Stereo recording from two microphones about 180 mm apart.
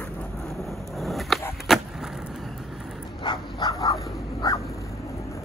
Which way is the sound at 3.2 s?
25° left (ahead or behind).